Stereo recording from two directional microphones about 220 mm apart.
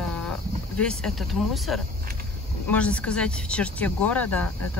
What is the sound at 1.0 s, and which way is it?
Speech, centre (ahead or behind).